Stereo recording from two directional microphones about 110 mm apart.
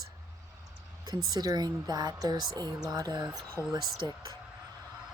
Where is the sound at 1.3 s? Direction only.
40° right (ahead or behind).